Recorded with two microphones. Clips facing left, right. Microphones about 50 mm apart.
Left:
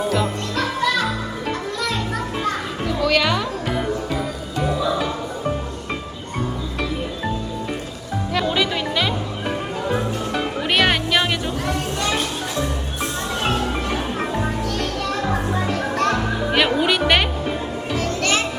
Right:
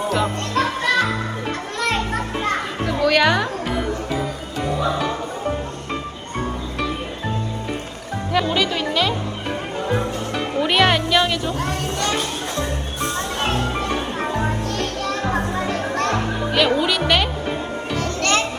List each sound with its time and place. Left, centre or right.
0.5 s music: right
1.8 s children playing: right
2.8 s music: centre
8.5 s music: centre
11.5 s music: right
13.1 s music: right
16.5 s music: centre